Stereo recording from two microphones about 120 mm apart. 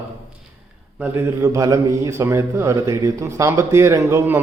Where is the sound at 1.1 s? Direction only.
25° right (ahead or behind).